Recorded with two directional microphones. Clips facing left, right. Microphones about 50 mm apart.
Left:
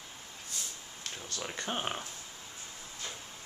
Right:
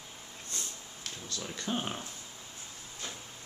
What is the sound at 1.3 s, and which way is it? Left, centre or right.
Speech, left.